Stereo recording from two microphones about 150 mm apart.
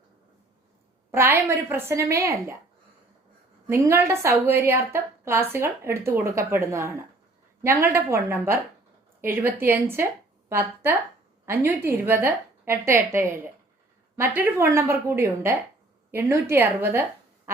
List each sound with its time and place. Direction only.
1.1 s a woman's voice: 15° right (ahead or behind)
3.7 s a woman's voice: 20° right (ahead or behind)